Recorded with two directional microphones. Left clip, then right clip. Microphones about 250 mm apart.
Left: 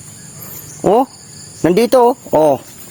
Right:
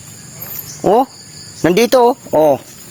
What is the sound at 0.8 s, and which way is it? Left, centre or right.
A man's voice, centre.